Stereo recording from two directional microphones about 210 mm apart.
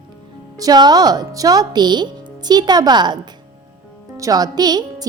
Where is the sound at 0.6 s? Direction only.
20° right (ahead or behind).